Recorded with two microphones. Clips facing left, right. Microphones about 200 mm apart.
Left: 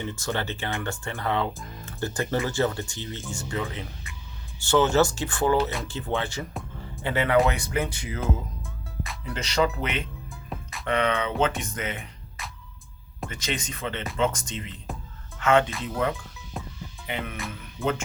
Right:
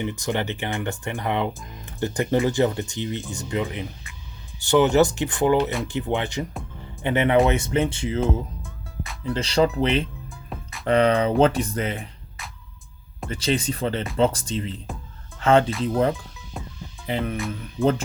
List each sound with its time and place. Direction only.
0.0 s speech: 15° right (ahead or behind)
8.2 s music: centre (ahead or behind)
9.2 s speech: 30° right (ahead or behind)
10.2 s music: centre (ahead or behind)
10.8 s speech: 35° right (ahead or behind)
12.4 s music: centre (ahead or behind)
13.2 s speech: 30° right (ahead or behind)
16.6 s music: centre (ahead or behind)
17.1 s speech: 35° right (ahead or behind)